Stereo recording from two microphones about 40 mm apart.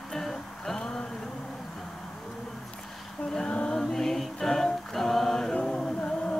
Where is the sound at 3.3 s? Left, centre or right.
Left.